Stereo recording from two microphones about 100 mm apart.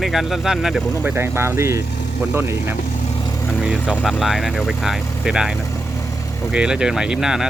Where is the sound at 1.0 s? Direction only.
25° right (ahead or behind).